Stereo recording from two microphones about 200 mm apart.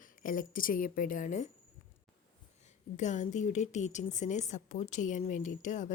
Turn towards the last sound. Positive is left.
turn(degrees=40)  # may be behind; listen again after turning